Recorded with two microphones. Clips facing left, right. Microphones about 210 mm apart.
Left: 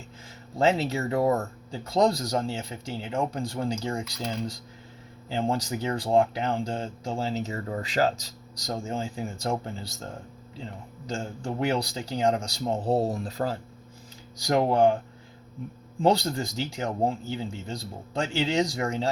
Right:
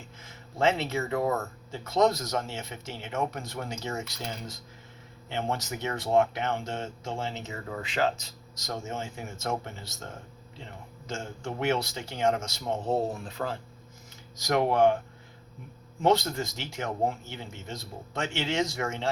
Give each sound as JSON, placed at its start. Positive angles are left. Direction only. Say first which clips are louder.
{"t": 0.6, "sound": "speech", "louder": "left 2 dB", "side_deg": 35}
{"t": 5.3, "sound": "speech", "louder": "left 4 dB", "side_deg": 30}
{"t": 11.1, "sound": "speech", "louder": "left 3 dB", "side_deg": 35}
{"t": 16.0, "sound": "speech", "louder": "left 1 dB", "side_deg": 30}